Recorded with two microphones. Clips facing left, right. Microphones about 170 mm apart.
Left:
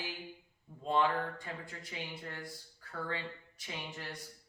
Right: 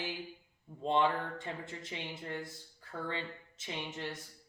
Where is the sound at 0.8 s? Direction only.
25° right (ahead or behind).